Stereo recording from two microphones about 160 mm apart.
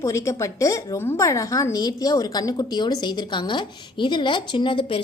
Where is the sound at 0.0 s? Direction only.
20° left (ahead or behind).